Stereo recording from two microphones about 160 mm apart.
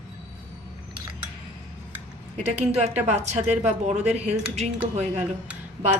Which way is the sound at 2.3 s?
40° right (ahead or behind).